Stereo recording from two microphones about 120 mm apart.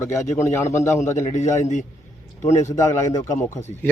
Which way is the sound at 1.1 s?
90° left.